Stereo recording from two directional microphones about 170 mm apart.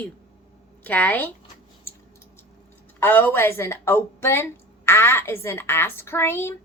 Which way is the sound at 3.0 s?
10° left (ahead or behind).